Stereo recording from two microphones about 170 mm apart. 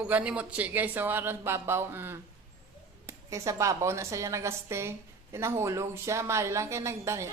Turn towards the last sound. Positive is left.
turn(degrees=-15)  # may be behind; listen again after turning